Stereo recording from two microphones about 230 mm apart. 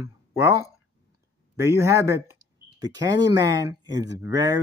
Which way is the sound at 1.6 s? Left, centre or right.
Centre.